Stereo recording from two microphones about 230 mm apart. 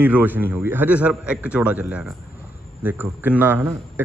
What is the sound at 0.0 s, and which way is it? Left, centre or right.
A man's voice, centre.